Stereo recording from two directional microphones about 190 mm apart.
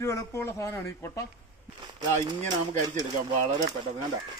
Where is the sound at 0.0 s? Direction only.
15° left (ahead or behind).